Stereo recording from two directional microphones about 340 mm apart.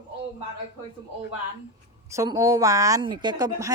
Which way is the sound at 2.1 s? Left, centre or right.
Centre.